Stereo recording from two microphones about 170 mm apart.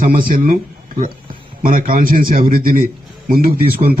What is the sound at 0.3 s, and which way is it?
A man's voice, 55° right (ahead or behind).